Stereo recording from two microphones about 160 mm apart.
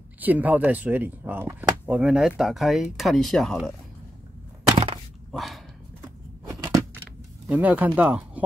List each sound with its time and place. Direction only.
0.2 s speech: 10° right (ahead or behind)
5.3 s speech: centre (ahead or behind)
6.0 s a sound: 20° right (ahead or behind)
7.4 s speech: 10° right (ahead or behind)